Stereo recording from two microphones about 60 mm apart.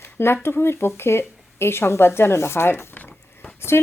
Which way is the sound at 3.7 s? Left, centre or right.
Left.